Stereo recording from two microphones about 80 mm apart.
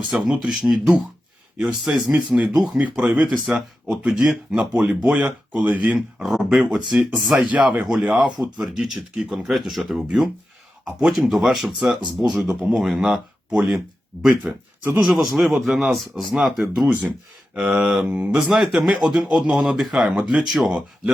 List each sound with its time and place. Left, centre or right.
0.1 s speech: centre
2.1 s speech: centre
4.7 s speech: centre
6.2 s speech: centre
15.0 s speech: centre
17.5 s speech: centre
18.5 s speech: centre